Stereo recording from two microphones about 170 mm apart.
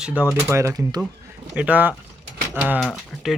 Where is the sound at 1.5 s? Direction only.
10° right (ahead or behind).